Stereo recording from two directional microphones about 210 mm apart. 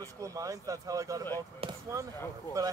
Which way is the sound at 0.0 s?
15° right (ahead or behind).